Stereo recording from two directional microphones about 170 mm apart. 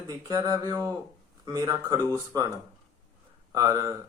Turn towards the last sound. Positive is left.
turn(degrees=-20)  # may be behind; listen again after turning